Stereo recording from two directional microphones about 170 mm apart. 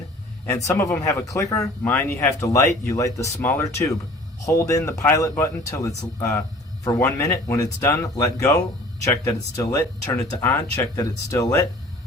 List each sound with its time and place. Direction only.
0.4 s speech: 15° left (ahead or behind)